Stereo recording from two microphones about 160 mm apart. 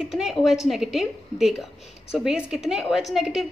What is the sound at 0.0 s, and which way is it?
A woman's voice, centre (ahead or behind).